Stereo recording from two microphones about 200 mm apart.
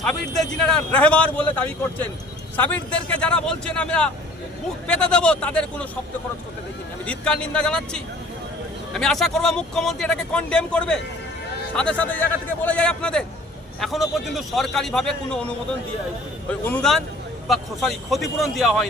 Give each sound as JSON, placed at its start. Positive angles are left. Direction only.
{"t": 0.6, "sound": "speech", "side_deg": 5}
{"t": 7.0, "sound": "speech", "side_deg": 5}